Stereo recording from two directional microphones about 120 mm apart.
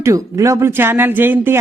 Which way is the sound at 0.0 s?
25° right (ahead or behind).